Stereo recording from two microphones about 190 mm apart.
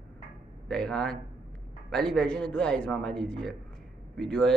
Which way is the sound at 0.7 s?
5° left (ahead or behind).